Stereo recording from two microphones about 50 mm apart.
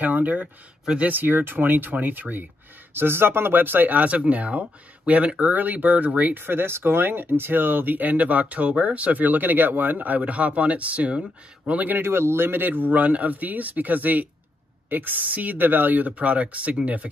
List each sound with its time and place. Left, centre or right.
0.0 s speech: right
1.1 s speech: right
12.0 s speech: right
16.1 s speech: right